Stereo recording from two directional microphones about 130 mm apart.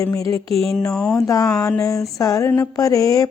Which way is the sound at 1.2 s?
25° left (ahead or behind).